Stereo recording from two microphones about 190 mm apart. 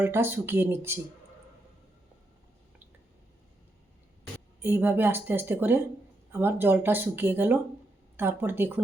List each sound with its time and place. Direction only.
0.0 s speech: 10° right (ahead or behind)
4.6 s speech: 10° right (ahead or behind)